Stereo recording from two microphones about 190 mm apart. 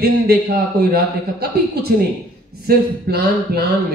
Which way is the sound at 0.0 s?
55° right (ahead or behind).